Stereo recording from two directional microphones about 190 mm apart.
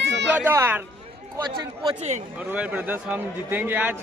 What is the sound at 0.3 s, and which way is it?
Speech, 10° right (ahead or behind).